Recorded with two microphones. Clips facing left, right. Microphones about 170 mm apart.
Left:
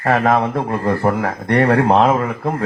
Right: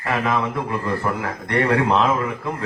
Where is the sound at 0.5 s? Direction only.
55° left (ahead or behind).